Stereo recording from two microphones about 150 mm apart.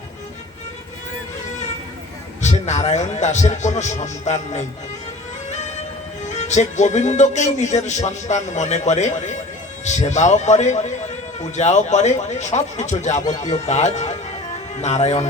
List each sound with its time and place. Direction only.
2.4 s a man's voice: 50° left (ahead or behind)
6.3 s a man's voice: 50° left (ahead or behind)